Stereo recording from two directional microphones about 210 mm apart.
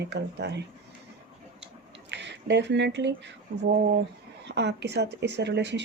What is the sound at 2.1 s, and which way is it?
Speech, 55° right (ahead or behind).